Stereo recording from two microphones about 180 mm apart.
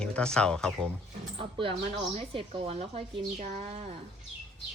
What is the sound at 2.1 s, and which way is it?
Speech, 30° right (ahead or behind).